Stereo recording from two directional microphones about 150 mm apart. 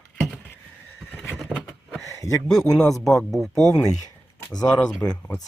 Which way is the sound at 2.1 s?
20° left (ahead or behind).